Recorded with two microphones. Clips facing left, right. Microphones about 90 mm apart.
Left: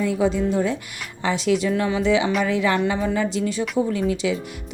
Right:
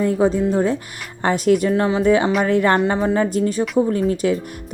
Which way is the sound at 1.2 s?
50° right (ahead or behind).